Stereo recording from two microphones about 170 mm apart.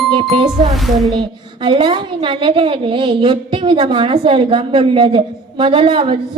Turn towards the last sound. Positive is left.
turn(degrees=-30)  # may be behind; listen again after turning